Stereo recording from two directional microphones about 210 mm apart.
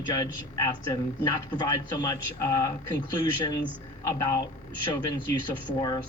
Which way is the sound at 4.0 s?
15° left (ahead or behind).